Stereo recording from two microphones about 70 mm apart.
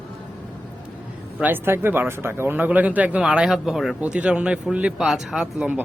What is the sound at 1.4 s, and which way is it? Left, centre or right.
Speech, right.